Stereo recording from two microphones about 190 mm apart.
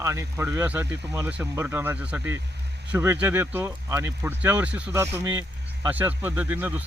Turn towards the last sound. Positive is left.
turn(degrees=-10)  # may be behind; listen again after turning